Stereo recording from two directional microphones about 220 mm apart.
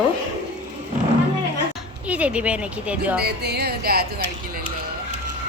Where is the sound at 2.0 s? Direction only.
5° right (ahead or behind).